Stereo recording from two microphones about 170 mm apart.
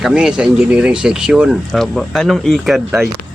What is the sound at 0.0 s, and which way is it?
Speech, 5° right (ahead or behind).